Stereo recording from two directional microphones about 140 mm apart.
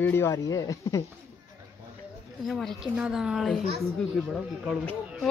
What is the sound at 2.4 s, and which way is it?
Speech, centre (ahead or behind).